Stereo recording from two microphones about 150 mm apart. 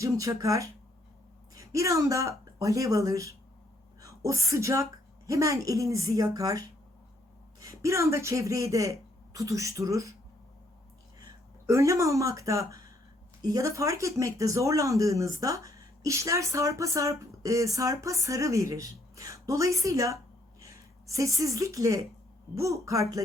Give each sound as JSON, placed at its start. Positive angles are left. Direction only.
{"t": 0.0, "sound": "speech", "side_deg": -20}
{"t": 11.2, "sound": "a woman's voice", "side_deg": -20}